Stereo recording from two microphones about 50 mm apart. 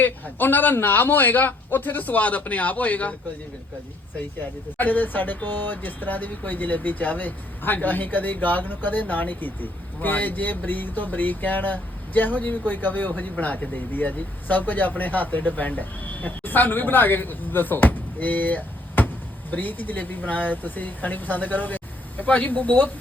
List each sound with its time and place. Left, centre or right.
0.0 s speech: left
4.8 s speech: left